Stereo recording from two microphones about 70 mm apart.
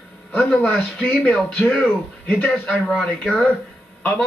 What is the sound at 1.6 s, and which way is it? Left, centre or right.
Speech, centre.